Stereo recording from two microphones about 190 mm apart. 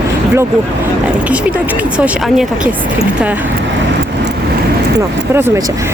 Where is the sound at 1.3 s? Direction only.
5° right (ahead or behind).